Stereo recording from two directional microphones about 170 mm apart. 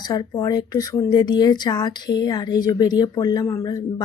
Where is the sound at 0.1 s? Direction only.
20° left (ahead or behind).